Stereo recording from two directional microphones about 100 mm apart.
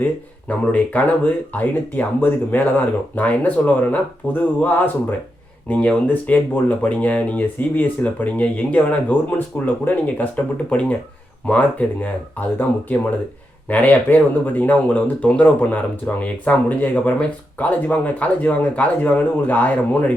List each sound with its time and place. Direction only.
0.0 s speech: 15° left (ahead or behind)
13.7 s speech: 15° left (ahead or behind)